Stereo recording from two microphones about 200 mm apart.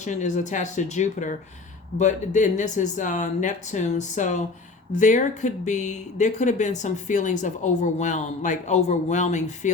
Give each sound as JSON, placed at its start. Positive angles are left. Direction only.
{"t": 0.0, "sound": "speech", "side_deg": 35}